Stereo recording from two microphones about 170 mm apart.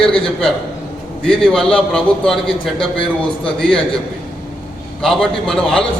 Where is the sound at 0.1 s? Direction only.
30° left (ahead or behind).